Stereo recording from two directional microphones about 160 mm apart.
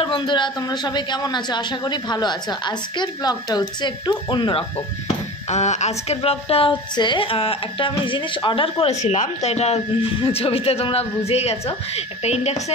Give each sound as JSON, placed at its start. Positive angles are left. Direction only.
{"t": 0.0, "sound": "a man's voice", "side_deg": 30}